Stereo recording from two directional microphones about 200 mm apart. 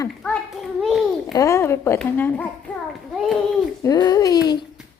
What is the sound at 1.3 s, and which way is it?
A woman's voice, 15° left (ahead or behind).